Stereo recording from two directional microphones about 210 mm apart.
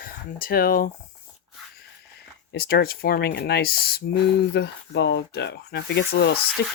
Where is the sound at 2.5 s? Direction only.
45° left (ahead or behind).